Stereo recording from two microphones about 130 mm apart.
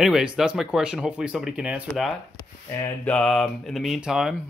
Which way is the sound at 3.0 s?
10° left (ahead or behind).